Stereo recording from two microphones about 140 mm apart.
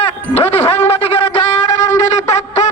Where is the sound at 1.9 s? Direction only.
55° left (ahead or behind).